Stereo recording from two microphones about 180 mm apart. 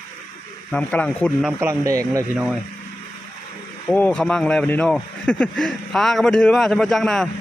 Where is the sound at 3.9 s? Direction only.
10° left (ahead or behind).